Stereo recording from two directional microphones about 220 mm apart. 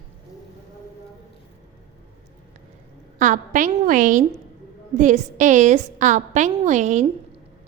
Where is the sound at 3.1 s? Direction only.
35° right (ahead or behind).